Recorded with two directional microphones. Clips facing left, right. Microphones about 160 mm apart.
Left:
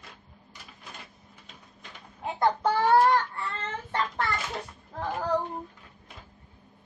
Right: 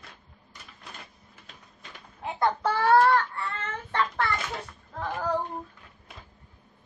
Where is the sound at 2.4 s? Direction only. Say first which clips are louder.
Left 1 dB; 20° left (ahead or behind).